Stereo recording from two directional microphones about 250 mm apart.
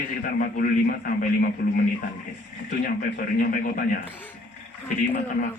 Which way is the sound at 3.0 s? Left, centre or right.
Left.